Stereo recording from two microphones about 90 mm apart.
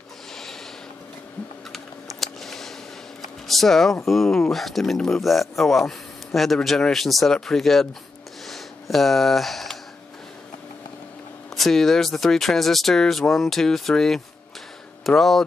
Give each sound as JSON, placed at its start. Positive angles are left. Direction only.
{"t": 1.7, "sound": "typing", "side_deg": 0}
{"t": 3.2, "sound": "speech", "side_deg": 0}
{"t": 8.5, "sound": "a sound", "side_deg": 0}
{"t": 11.5, "sound": "speech", "side_deg": 0}